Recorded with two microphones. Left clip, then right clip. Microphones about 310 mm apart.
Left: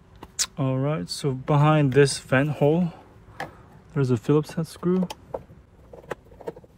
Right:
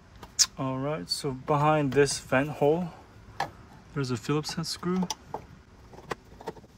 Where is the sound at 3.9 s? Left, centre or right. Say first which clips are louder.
Left 8 dB; centre.